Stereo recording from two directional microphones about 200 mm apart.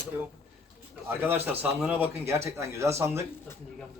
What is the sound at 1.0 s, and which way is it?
Speech, 10° right (ahead or behind).